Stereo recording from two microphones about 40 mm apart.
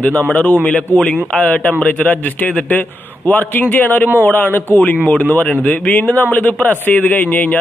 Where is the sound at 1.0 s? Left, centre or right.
Left.